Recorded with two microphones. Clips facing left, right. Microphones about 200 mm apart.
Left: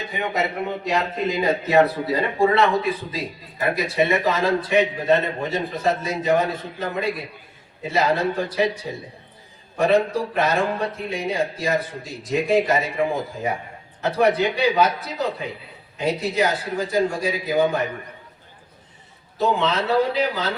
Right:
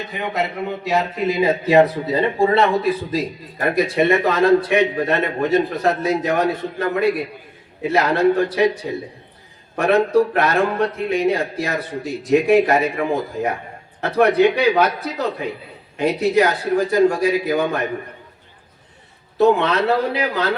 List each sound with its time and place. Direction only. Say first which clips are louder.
0.9 s a man's voice: right 4 dB; 5° right (ahead or behind); by 2.6 s 25° right (ahead or behind)
3.6 s a man's voice: right 4 dB; 55° right (ahead or behind)
19.4 s a man's voice: right 6 dB; 60° right (ahead or behind)